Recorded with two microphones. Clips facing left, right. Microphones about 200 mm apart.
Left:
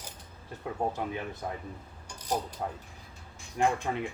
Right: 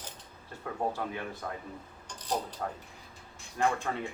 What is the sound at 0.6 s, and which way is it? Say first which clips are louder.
Speech: left 1 dB; 20° left (ahead or behind).